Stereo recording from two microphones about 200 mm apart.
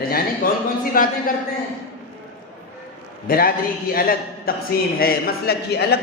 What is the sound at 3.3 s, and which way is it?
A man's voice, 45° left (ahead or behind).